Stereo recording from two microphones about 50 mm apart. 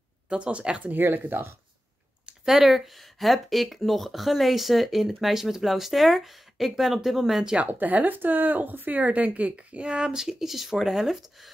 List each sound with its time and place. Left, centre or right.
0.3 s speech: right
0.9 s speech: right
2.4 s speech: centre
7.5 s speech: right; by 11.5 s centre